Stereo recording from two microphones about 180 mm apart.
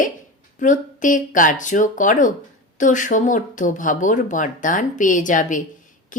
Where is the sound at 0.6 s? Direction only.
45° left (ahead or behind).